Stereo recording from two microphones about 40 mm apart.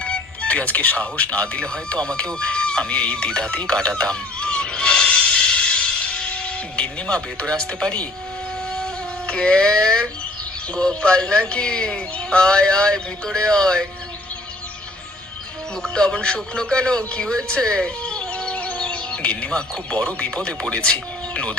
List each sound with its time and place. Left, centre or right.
0.0 s speech: left
3.7 s a sound: left
8.8 s music: left
10.8 s speech: left
16.0 s speech: left
18.3 s music: left
19.5 s speech: left